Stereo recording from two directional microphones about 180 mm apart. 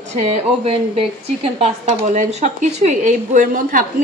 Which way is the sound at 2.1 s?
45° right (ahead or behind).